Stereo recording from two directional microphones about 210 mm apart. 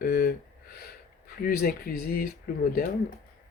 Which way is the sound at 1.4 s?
45° left (ahead or behind).